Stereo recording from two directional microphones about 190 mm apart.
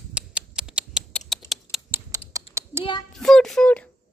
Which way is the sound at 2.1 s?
15° right (ahead or behind).